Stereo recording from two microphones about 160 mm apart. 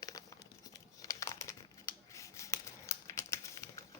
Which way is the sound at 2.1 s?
20° left (ahead or behind).